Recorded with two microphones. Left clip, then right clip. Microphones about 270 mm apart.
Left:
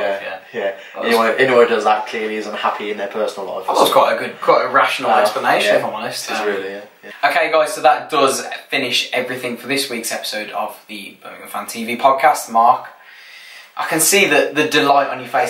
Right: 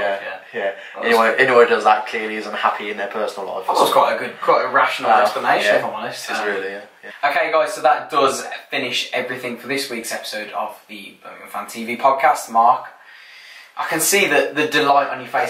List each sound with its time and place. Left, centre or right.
0.0 s speech: centre
3.3 s speech: centre
3.9 s speech: centre
13.7 s speech: centre